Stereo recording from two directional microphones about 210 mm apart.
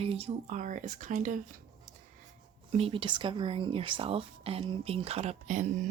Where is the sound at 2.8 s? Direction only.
25° right (ahead or behind).